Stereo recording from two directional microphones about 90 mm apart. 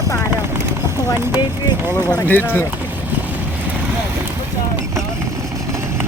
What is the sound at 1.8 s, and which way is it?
Speech, 25° right (ahead or behind).